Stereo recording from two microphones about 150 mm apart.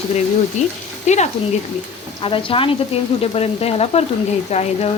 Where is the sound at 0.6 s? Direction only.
50° left (ahead or behind).